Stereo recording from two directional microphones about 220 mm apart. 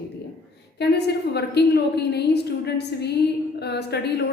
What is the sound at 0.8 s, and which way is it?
A woman's voice, 50° left (ahead or behind).